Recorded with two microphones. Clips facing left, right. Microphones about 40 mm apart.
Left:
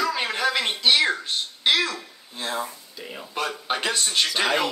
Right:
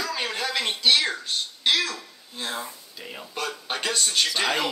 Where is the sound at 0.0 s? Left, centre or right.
Centre.